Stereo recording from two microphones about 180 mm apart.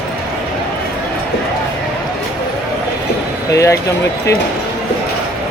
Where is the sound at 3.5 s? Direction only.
15° left (ahead or behind).